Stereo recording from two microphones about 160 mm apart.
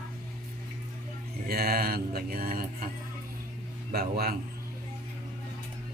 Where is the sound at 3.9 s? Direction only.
75° right (ahead or behind).